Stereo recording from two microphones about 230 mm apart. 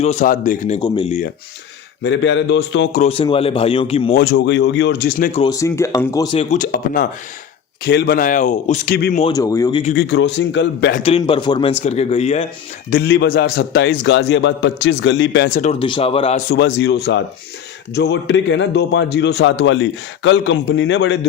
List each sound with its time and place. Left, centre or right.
0.0 s speech: left
0.8 s a man's voice: centre
2.0 s a man's voice: left
2.9 s a man's voice: left
4.2 s a man's voice: left
5.3 s speech: centre
9.0 s a man's voice: left
9.2 s speech: centre
9.9 s a man's voice: left
11.0 s a man's voice: left
12.9 s a man's voice: left
15.7 s a man's voice: left
16.5 s a man's voice: left